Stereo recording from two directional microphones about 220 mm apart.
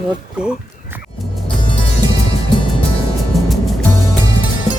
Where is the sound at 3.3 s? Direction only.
Centre (ahead or behind).